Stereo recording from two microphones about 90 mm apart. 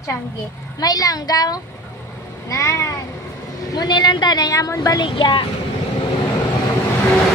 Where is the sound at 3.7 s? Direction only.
50° left (ahead or behind).